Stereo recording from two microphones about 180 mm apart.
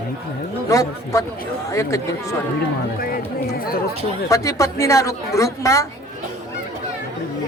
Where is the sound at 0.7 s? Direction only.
15° left (ahead or behind).